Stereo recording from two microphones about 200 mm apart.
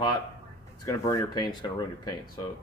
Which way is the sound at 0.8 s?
15° left (ahead or behind).